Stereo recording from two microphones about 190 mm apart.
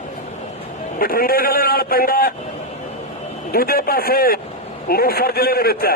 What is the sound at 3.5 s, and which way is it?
A man's voice, 50° left (ahead or behind).